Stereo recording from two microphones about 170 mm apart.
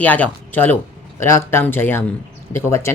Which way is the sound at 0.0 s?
10° left (ahead or behind).